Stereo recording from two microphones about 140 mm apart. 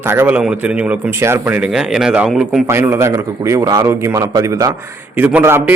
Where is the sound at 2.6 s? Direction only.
20° right (ahead or behind).